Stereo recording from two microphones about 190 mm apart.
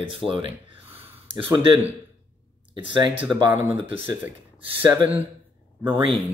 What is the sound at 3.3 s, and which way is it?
Speech, 25° right (ahead or behind).